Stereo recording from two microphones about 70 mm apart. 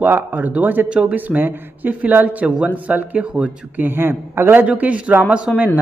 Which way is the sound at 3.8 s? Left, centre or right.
Right.